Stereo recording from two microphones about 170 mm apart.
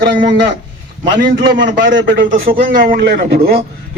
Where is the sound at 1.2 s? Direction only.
60° right (ahead or behind); by 2.0 s 75° right (ahead or behind).